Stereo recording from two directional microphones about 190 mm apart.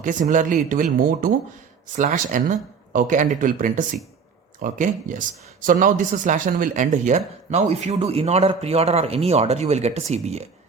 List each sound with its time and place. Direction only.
0.0 s speech: 40° right (ahead or behind)